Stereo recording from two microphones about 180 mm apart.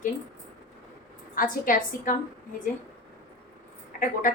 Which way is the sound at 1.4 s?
50° left (ahead or behind).